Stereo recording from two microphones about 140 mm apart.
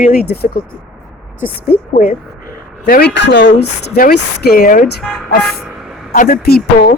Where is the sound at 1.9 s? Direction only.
75° left (ahead or behind).